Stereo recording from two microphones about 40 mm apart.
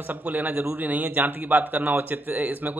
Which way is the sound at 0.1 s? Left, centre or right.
Right.